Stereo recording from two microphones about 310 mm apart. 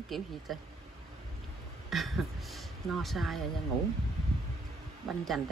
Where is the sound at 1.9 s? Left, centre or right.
Centre.